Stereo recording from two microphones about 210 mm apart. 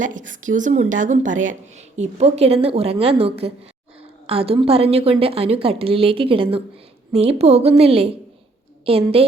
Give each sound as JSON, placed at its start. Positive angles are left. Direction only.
{"t": 0.0, "sound": "a woman's voice", "side_deg": -35}